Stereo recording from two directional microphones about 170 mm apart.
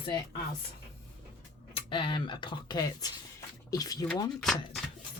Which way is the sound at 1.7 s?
25° left (ahead or behind).